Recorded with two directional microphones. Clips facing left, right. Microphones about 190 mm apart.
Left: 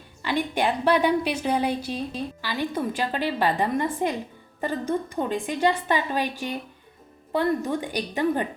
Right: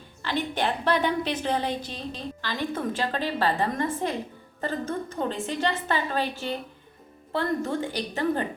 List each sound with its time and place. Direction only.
0.2 s a woman's voice: 10° left (ahead or behind)